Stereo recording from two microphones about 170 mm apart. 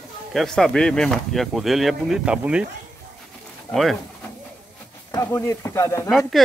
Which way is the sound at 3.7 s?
Centre (ahead or behind).